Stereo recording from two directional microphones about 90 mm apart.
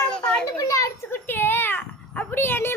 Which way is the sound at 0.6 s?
40° left (ahead or behind).